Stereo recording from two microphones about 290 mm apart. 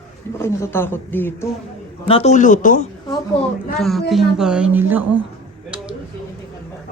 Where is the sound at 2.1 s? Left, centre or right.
Left.